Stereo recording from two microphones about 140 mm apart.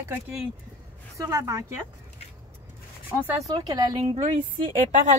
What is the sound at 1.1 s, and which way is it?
Speech, 20° right (ahead or behind).